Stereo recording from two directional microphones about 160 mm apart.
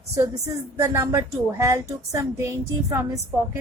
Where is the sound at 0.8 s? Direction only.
15° right (ahead or behind).